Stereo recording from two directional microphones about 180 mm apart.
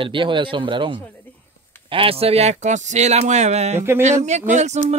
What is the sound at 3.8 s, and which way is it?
Speech, 15° right (ahead or behind).